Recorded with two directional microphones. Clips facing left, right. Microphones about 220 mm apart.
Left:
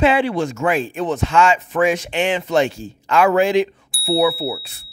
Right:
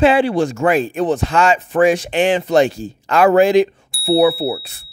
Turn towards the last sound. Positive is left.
turn(degrees=-50)  # may be behind; listen again after turning